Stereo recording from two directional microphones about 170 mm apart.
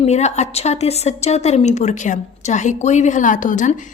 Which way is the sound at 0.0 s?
40° left (ahead or behind).